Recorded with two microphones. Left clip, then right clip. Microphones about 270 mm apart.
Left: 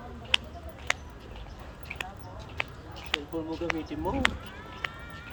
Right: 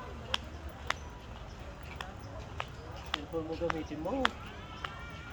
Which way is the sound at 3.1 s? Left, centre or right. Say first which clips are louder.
Left 6 dB; left.